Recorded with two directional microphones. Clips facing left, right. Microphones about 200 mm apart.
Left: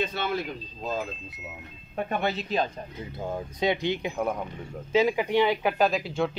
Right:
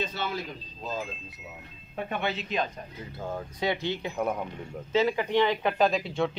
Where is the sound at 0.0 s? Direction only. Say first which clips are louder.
Left 3 dB; 55° left (ahead or behind).